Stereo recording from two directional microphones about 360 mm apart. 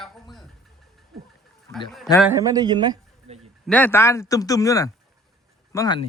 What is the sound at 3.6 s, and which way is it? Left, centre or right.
Speech, centre.